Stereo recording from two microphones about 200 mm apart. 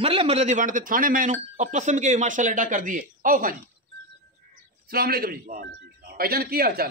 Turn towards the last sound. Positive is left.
turn(degrees=-50)  # may be behind; listen again after turning